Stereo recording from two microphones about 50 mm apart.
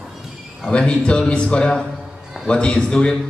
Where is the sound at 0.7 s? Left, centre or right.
Centre.